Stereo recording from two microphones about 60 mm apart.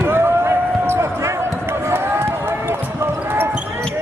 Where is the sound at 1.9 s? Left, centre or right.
Right.